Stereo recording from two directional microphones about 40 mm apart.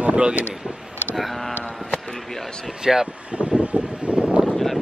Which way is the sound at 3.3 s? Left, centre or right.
Right.